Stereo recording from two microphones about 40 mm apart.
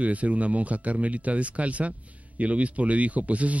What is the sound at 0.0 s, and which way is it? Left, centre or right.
Speech, right.